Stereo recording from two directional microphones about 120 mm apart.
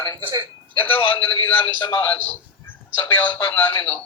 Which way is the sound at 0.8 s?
15° left (ahead or behind).